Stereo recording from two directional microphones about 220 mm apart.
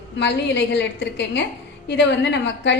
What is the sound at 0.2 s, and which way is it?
A woman's voice, 50° left (ahead or behind).